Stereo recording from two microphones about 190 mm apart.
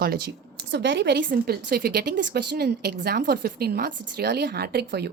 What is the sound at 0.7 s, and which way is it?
A woman's voice, 65° right (ahead or behind).